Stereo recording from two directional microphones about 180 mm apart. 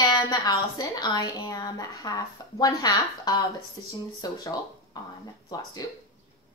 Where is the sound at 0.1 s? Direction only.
20° left (ahead or behind).